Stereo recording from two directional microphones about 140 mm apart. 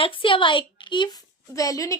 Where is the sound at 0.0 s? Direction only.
40° left (ahead or behind).